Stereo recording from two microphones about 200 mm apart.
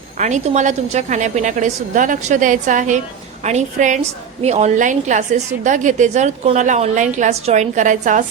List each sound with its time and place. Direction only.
0.2 s a woman's voice: 35° right (ahead or behind)